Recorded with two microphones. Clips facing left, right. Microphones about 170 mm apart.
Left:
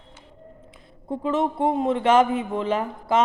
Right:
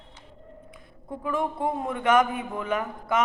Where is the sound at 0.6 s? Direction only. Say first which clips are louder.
Left 9 dB; 25° left (ahead or behind).